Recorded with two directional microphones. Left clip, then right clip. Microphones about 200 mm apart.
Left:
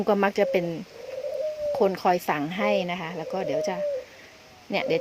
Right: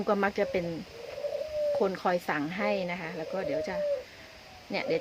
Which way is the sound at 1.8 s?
35° left (ahead or behind).